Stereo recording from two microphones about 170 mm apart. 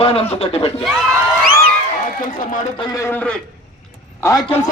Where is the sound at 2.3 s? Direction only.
50° left (ahead or behind).